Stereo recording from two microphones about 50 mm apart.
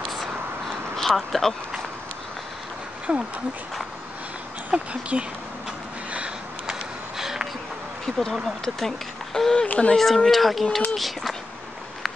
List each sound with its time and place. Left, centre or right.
0.9 s speech: centre
3.1 s speech: right
4.6 s speech: right
6.1 s a sound: right
7.2 s a sound: centre
8.0 s speech: centre
9.7 s speech: left
9.9 s speech: centre